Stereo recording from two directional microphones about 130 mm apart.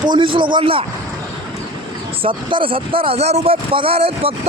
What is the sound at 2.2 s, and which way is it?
Speech, 40° right (ahead or behind).